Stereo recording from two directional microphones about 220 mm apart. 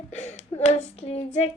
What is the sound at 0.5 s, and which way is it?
Child singing, 30° left (ahead or behind).